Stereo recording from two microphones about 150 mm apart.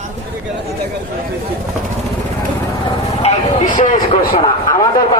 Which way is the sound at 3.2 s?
50° left (ahead or behind).